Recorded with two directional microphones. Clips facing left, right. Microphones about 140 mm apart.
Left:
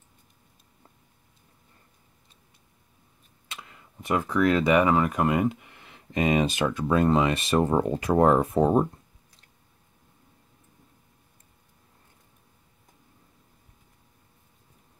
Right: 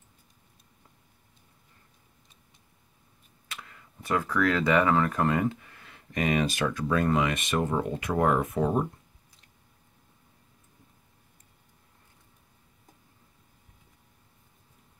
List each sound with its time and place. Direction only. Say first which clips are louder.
3.4 s speech: left 1 dB; 20° left (ahead or behind)